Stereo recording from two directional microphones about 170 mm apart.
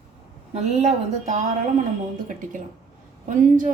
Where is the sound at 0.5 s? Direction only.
40° right (ahead or behind).